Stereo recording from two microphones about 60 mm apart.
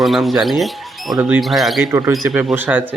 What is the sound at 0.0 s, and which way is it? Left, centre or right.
Speech, centre.